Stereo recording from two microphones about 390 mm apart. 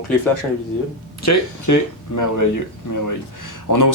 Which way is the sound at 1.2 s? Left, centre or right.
Left.